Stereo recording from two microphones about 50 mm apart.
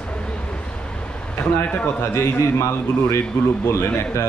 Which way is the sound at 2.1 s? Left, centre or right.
Left.